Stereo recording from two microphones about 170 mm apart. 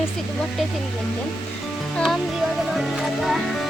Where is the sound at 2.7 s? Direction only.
Centre (ahead or behind).